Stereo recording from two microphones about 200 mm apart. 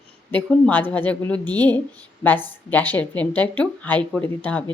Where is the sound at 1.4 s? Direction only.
20° right (ahead or behind).